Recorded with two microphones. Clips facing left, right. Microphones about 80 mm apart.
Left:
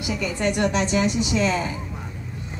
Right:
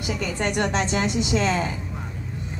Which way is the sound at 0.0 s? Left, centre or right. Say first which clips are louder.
Left 2 dB; right.